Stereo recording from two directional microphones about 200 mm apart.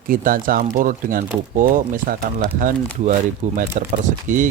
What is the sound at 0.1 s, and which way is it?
Speech, 45° right (ahead or behind).